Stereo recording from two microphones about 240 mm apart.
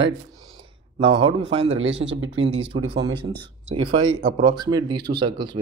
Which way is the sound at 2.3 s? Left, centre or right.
Right.